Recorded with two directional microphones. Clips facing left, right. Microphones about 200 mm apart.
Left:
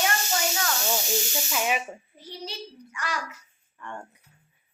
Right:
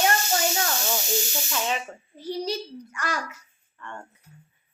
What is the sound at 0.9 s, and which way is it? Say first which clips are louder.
Speech: even; 10° left (ahead or behind).